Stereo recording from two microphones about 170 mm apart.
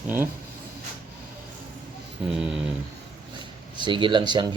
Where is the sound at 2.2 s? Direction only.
5° right (ahead or behind).